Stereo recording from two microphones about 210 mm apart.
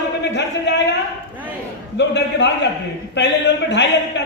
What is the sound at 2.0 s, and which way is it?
A man's voice, 55° left (ahead or behind).